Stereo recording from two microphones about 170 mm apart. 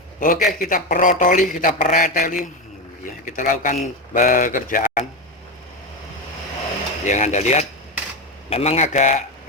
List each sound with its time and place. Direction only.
0.2 s speech: 55° left (ahead or behind)
7.0 s speech: 45° left (ahead or behind)